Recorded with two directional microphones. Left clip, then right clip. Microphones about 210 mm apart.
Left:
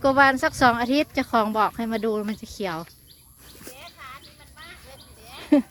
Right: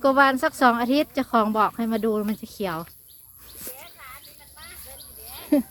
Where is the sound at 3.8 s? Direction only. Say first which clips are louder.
Left 2 dB; 55° left (ahead or behind).